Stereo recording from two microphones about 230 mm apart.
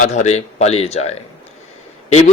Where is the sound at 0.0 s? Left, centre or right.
Left.